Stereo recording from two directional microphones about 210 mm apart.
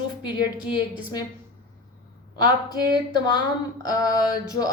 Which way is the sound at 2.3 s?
20° left (ahead or behind).